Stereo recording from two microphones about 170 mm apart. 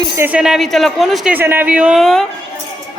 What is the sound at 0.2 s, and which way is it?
A woman's voice, 10° right (ahead or behind).